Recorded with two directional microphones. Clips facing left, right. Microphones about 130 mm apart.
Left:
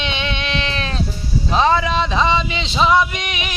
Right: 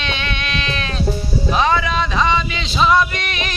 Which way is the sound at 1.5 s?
30° left (ahead or behind).